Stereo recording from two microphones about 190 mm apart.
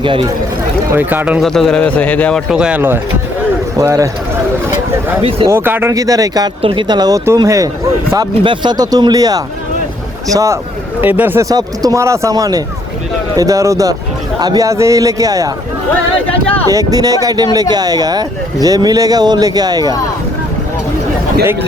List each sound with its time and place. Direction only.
0.0 s speech: 25° right (ahead or behind)
0.9 s speech: 10° right (ahead or behind); by 2.4 s 5° left (ahead or behind)
2.5 s speech: 5° right (ahead or behind)
5.5 s speech: 10° right (ahead or behind)
16.6 s speech: 20° right (ahead or behind)